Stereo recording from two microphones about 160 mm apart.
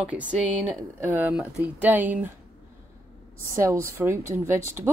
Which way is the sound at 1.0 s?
10° right (ahead or behind).